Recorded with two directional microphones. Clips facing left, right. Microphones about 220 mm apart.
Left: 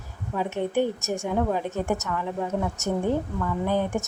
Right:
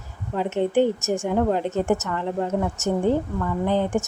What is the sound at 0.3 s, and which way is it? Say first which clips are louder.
Speech: right 4 dB; 15° right (ahead or behind).